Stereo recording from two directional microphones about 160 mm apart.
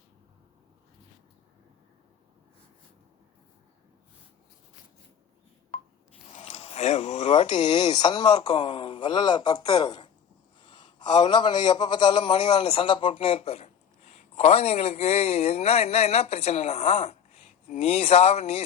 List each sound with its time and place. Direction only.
5.7 s rub: 40° left (ahead or behind)
6.3 s a sound: 40° left (ahead or behind)
7.3 s a man's voice: 30° left (ahead or behind)